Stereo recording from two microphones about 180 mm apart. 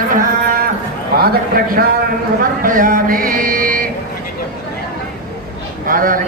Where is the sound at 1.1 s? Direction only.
55° right (ahead or behind).